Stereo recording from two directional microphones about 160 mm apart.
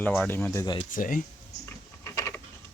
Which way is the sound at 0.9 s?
60° left (ahead or behind).